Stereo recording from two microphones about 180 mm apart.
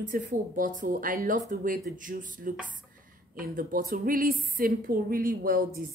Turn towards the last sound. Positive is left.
turn(degrees=-50)  # may be behind; listen again after turning